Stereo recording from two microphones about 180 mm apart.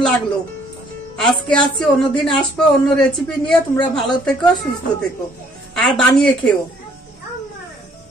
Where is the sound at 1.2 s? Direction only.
5° left (ahead or behind).